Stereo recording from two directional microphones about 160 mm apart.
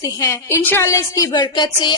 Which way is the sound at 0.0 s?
20° left (ahead or behind).